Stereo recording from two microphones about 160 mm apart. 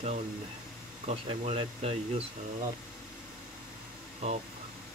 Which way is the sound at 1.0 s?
40° right (ahead or behind).